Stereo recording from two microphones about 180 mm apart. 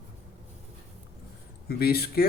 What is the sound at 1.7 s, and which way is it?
Speech, 60° left (ahead or behind).